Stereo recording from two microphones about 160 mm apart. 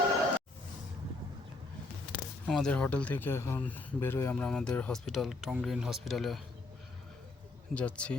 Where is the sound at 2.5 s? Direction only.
5° left (ahead or behind).